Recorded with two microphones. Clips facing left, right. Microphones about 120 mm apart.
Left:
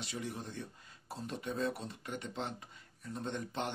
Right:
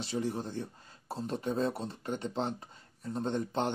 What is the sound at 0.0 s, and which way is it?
Speech, 30° right (ahead or behind).